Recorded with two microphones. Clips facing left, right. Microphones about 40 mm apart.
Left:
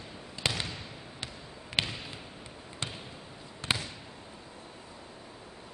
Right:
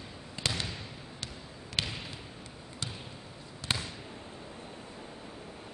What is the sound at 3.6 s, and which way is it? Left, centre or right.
Basketball bounce, left.